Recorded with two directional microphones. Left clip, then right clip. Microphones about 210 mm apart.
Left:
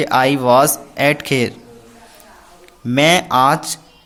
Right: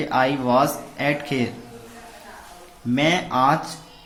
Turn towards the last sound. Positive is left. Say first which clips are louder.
# left 6 dB
turn(degrees=50)  # may be behind; listen again after turning